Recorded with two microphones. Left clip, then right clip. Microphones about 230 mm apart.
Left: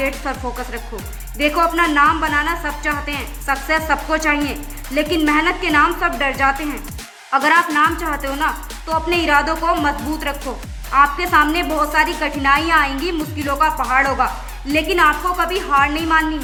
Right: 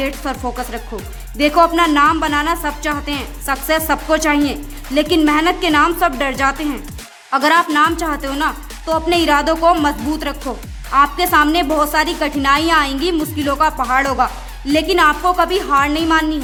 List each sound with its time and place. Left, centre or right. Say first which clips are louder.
0.0 s speech: right 1 dB; right